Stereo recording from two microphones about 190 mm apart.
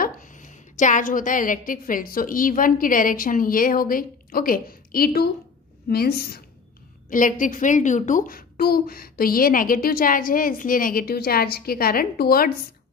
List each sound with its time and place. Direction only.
0.0 s a woman's voice: 45° left (ahead or behind)
7.1 s a woman's voice: 45° left (ahead or behind)